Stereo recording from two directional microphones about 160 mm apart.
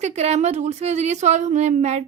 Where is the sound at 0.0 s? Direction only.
45° right (ahead or behind).